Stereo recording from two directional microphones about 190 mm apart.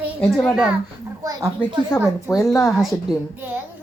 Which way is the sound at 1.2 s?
20° right (ahead or behind).